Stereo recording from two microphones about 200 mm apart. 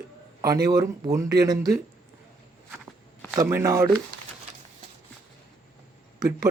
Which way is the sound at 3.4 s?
15° right (ahead or behind).